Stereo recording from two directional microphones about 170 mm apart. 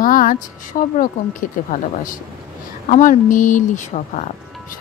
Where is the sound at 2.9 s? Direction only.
50° left (ahead or behind).